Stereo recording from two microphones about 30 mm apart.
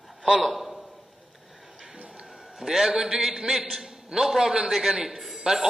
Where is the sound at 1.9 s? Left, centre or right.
Right.